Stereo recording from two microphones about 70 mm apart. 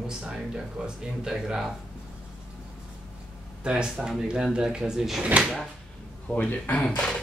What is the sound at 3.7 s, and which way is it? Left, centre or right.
Speech, centre.